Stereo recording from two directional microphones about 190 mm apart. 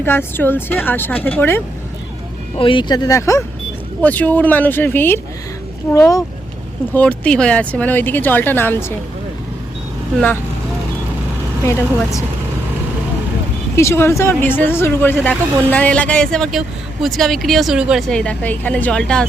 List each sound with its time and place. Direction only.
0.0 s speech: 10° left (ahead or behind)
2.6 s speech: 25° left (ahead or behind); by 8.9 s 10° left (ahead or behind)
11.6 s speech: 15° left (ahead or behind)
13.7 s speech: 15° left (ahead or behind)